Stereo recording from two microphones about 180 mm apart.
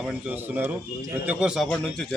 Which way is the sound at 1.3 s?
5° right (ahead or behind).